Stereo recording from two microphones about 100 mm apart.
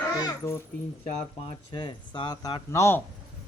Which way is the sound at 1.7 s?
55° left (ahead or behind).